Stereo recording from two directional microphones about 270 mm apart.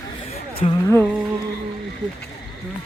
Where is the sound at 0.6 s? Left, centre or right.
Centre.